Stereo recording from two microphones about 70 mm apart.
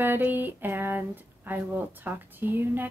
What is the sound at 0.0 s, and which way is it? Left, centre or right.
A woman's voice, right.